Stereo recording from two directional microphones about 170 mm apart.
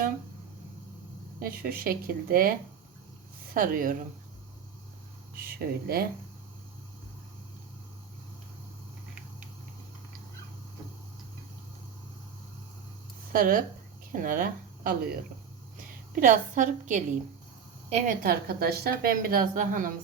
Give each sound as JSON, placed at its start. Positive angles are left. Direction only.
{"t": 1.4, "sound": "a woman's voice", "side_deg": -60}
{"t": 5.4, "sound": "a woman's voice", "side_deg": -60}
{"t": 13.3, "sound": "a woman's voice", "side_deg": -55}
{"t": 16.2, "sound": "a woman's voice", "side_deg": -50}
{"t": 18.2, "sound": "a woman's voice", "side_deg": -65}